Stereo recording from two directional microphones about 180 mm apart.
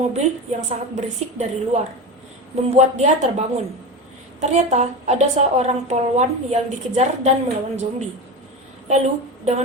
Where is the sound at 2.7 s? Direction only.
40° right (ahead or behind).